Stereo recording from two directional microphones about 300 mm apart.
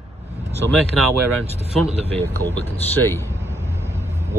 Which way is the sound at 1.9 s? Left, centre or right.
Right.